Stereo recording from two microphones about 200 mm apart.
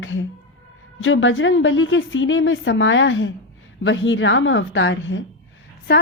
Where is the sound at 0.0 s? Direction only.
75° left (ahead or behind).